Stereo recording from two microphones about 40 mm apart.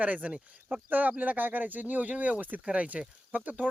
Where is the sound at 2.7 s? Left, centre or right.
Right.